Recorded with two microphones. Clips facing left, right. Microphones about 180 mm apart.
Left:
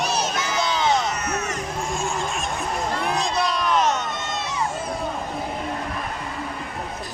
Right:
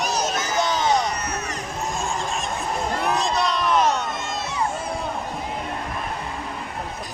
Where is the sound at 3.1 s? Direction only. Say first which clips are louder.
Right 1 dB; centre (ahead or behind).